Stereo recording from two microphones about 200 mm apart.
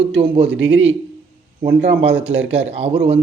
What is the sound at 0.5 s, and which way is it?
Speech, 70° right (ahead or behind).